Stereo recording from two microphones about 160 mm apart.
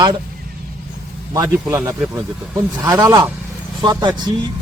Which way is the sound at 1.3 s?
20° right (ahead or behind).